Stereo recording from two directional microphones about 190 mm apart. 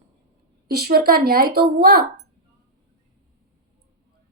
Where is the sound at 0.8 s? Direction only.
55° right (ahead or behind).